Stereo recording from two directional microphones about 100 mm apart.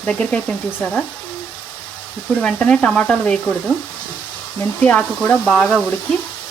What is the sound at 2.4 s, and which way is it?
Speech, 10° left (ahead or behind).